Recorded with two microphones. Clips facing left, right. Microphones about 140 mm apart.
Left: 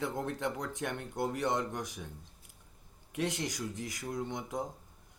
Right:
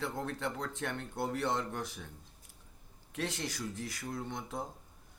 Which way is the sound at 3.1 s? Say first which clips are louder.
Left 3 dB; 15° left (ahead or behind).